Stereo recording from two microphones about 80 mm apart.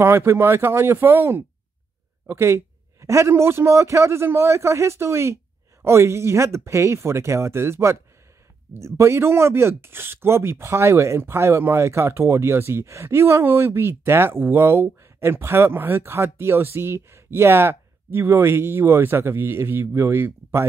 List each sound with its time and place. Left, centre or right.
0.0 s speech: right